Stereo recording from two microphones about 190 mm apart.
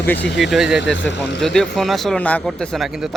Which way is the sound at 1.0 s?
70° left (ahead or behind).